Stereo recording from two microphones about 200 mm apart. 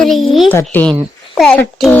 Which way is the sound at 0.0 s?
Centre (ahead or behind).